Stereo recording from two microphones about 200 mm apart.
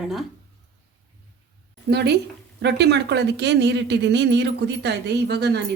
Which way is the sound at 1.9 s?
55° right (ahead or behind).